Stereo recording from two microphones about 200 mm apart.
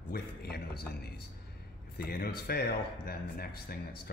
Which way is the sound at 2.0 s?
50° left (ahead or behind).